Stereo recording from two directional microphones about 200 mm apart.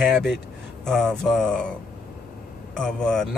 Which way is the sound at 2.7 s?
5° left (ahead or behind).